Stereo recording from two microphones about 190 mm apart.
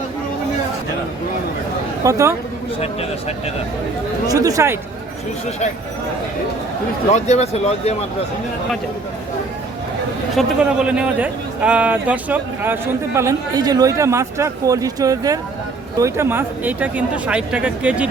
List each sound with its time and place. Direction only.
2.0 s a man's voice: 15° right (ahead or behind)
2.8 s speech: 30° left (ahead or behind)
4.3 s a man's voice: 20° right (ahead or behind)
7.1 s speech: 35° left (ahead or behind)
10.3 s a man's voice: 5° right (ahead or behind)